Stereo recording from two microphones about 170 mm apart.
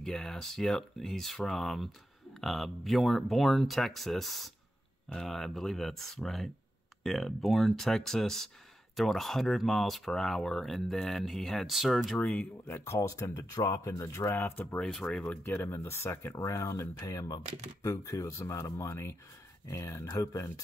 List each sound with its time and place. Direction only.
0.0 s speech: 5° left (ahead or behind); by 20.6 s 20° left (ahead or behind)